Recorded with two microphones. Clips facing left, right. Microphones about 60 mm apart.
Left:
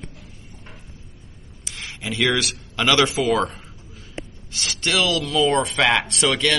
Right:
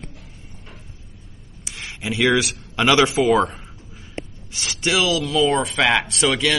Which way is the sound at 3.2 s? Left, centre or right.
Centre.